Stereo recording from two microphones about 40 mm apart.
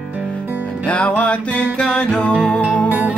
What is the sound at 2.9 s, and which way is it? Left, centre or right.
Music, right.